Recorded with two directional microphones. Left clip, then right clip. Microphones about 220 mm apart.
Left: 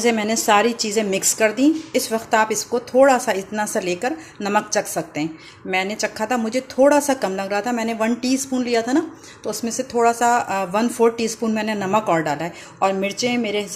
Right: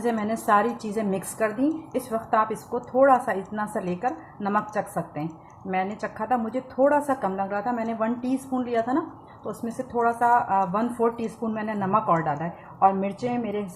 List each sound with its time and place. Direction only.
0.0 s a woman's voice: 40° left (ahead or behind)
10.0 s speech: 45° left (ahead or behind)